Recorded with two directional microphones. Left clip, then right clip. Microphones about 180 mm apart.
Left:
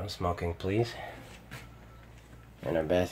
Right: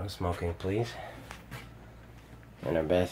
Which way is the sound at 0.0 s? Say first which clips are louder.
Left 1 dB; 15° left (ahead or behind).